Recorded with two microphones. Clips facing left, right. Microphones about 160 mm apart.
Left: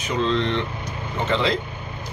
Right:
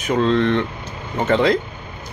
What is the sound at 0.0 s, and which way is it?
Speech, 50° right (ahead or behind).